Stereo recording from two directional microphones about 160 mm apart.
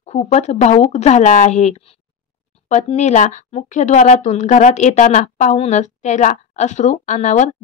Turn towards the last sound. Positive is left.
turn(degrees=50)  # may be behind; listen again after turning